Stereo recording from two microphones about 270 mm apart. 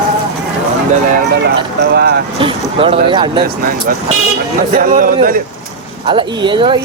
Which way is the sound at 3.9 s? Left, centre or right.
Right.